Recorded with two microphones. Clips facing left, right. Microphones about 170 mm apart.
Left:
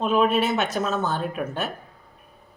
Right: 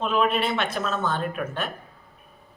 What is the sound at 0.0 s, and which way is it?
Speech, 40° left (ahead or behind).